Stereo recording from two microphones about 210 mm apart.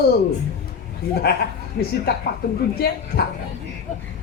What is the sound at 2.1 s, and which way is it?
A man's voice, 50° left (ahead or behind).